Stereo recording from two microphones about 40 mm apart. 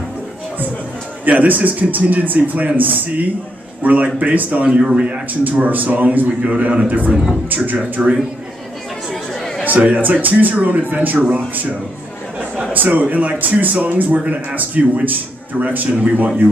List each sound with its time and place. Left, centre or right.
1.4 s a man's voice: right
5.4 s a man's voice: right
7.1 s a man's voice: centre
7.4 s speech: right
9.1 s chatter: centre
9.7 s speech: right
12.7 s a man's voice: right